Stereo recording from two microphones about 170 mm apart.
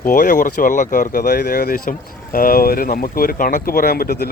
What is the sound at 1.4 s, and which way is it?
Speech, 65° left (ahead or behind).